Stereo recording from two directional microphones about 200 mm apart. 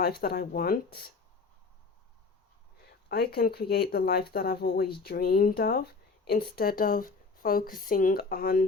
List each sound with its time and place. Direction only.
0.0 s speech: 50° left (ahead or behind)
3.1 s speech: 50° left (ahead or behind)